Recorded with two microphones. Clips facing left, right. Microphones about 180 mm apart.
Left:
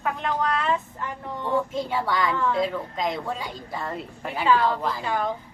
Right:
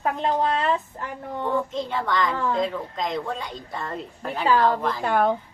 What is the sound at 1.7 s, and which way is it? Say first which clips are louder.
A woman's voice: even; 5° left (ahead or behind).